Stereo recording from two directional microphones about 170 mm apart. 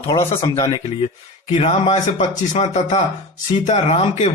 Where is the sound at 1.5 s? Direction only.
30° left (ahead or behind).